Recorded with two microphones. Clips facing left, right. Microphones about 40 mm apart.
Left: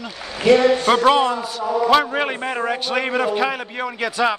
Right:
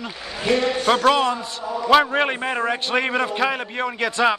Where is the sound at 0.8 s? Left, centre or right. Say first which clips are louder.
Left 2 dB; centre.